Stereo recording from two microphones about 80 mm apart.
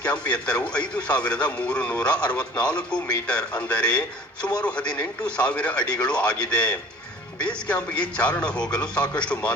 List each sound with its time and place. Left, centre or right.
0.0 s a man's voice: centre